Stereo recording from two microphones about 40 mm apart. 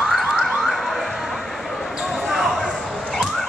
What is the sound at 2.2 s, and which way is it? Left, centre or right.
Basketball bounce, centre.